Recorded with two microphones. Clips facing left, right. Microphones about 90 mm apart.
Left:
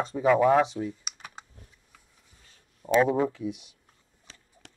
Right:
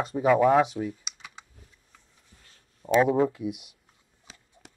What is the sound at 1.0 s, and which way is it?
Computer keyboard, 45° left (ahead or behind).